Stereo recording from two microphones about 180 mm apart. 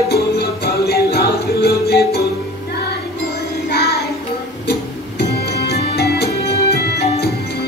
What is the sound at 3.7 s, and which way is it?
Music, 65° left (ahead or behind).